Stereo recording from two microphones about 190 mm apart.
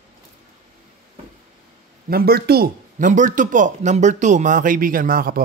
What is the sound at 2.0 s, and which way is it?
Speech, 55° right (ahead or behind).